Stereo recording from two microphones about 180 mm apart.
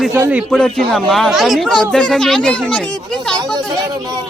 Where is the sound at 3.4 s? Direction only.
25° right (ahead or behind).